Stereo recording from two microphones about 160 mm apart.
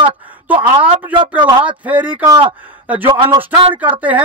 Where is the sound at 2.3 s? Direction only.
30° right (ahead or behind).